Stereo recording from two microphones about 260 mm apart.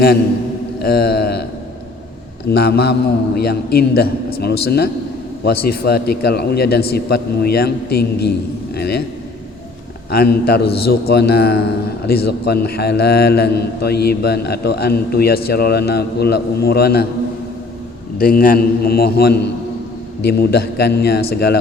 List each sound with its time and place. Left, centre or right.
0.8 s mantra: left
2.5 s a man's voice: left
10.1 s a man's voice: left
18.2 s a man's voice: left